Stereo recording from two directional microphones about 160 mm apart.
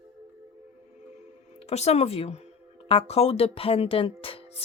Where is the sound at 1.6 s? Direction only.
40° left (ahead or behind).